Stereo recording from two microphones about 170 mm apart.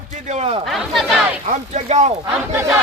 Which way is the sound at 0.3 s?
40° right (ahead or behind).